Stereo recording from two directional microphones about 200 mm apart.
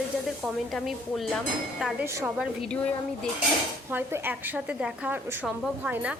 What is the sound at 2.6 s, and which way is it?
Stir, 5° left (ahead or behind).